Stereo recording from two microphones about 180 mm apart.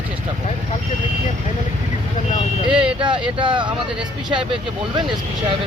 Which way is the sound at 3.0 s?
25° right (ahead or behind).